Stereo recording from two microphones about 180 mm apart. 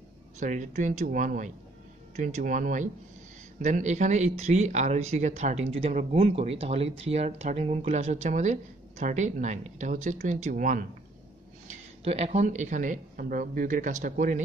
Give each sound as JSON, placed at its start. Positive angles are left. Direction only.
{"t": 0.4, "sound": "speech", "side_deg": -45}
{"t": 11.6, "sound": "speech", "side_deg": -35}